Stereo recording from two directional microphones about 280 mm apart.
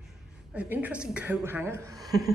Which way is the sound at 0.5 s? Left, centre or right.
Centre.